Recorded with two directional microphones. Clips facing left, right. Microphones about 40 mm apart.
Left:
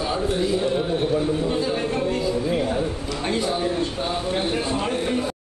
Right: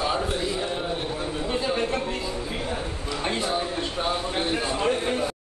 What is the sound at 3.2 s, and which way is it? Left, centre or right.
Speech, centre.